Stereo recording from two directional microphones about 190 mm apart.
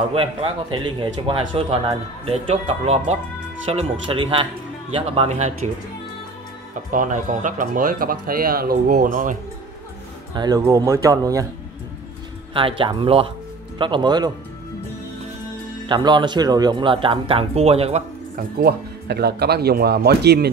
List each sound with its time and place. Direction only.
0.1 s speech: 30° right (ahead or behind)
6.9 s speech: 45° right (ahead or behind)
10.3 s speech: 20° right (ahead or behind)
12.5 s speech: 25° right (ahead or behind)
15.9 s speech: 25° right (ahead or behind)
18.3 s speech: 55° right (ahead or behind)